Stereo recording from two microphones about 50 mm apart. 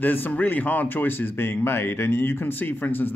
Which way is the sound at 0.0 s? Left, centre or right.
Left.